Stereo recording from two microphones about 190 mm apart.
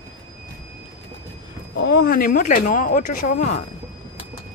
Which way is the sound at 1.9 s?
55° left (ahead or behind).